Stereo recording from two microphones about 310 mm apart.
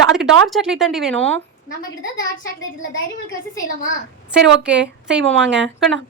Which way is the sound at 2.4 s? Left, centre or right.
Left.